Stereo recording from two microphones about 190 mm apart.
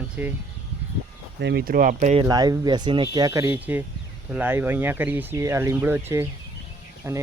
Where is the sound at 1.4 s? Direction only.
60° right (ahead or behind); by 2.2 s 35° right (ahead or behind).